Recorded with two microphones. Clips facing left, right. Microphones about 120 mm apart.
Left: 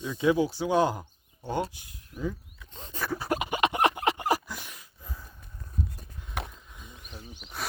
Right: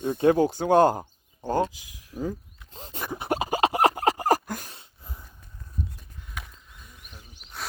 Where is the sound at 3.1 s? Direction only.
25° right (ahead or behind); by 4.7 s 45° right (ahead or behind).